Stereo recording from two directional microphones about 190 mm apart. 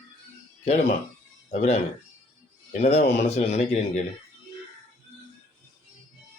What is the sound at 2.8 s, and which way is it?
A man's voice, 40° left (ahead or behind).